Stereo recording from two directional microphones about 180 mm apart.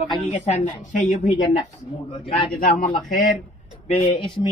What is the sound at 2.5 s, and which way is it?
Speech, 50° left (ahead or behind).